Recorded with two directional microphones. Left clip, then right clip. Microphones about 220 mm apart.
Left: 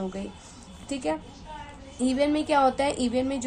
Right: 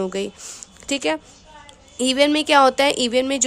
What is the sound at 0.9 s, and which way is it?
A woman's voice, 40° right (ahead or behind).